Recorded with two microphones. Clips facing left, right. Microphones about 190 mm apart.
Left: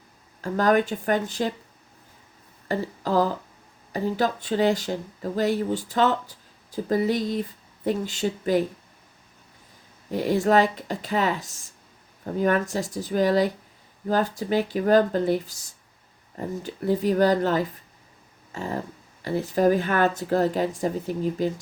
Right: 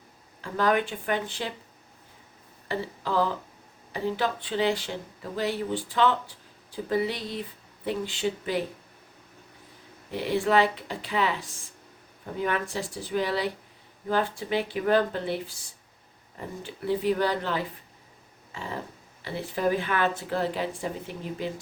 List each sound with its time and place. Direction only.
0.4 s speech: 45° left (ahead or behind)
2.6 s speech: 45° left (ahead or behind)
10.1 s speech: 45° left (ahead or behind)
18.5 s a sound: 45° left (ahead or behind)
19.2 s speech: 45° left (ahead or behind)